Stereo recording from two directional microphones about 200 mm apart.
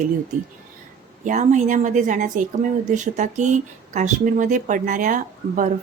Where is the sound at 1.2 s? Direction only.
35° right (ahead or behind).